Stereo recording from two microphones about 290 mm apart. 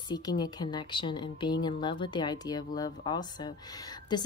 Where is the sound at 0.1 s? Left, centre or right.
Centre.